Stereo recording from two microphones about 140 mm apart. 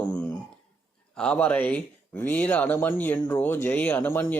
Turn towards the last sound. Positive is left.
turn(degrees=15)  # may be behind; listen again after turning